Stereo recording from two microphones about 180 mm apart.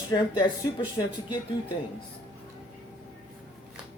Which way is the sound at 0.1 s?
20° left (ahead or behind).